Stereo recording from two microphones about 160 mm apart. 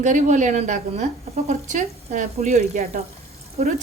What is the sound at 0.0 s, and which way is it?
Speech, 50° right (ahead or behind).